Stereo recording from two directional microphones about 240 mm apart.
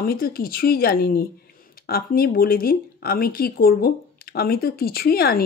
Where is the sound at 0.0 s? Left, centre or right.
Left.